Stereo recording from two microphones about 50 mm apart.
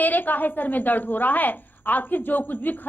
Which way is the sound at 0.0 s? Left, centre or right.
Left.